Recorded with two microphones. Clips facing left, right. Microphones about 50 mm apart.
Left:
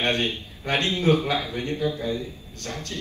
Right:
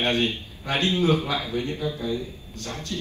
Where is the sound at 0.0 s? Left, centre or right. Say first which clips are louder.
Right 1 dB; left.